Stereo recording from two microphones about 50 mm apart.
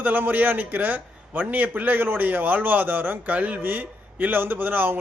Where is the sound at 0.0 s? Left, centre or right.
Right.